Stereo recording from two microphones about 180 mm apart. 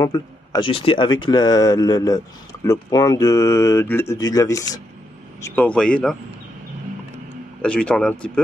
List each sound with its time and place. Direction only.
0.0 s speech: 25° left (ahead or behind)
5.4 s speech: 5° left (ahead or behind)
7.6 s speech: 5° left (ahead or behind)